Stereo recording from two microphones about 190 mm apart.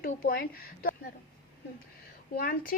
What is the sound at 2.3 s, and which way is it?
Speech, 50° left (ahead or behind).